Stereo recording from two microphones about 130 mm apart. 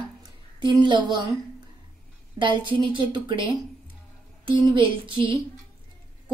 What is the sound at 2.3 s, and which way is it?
A woman's voice, 40° right (ahead or behind).